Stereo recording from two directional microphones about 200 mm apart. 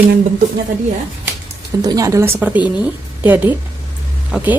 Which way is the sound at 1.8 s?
15° right (ahead or behind).